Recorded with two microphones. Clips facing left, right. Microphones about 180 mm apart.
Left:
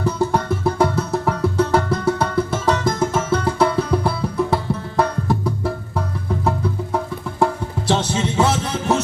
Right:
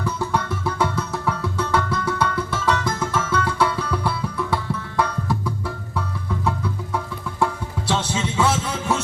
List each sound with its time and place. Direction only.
0.0 s music: 45° left (ahead or behind)
6.9 s music: 40° left (ahead or behind)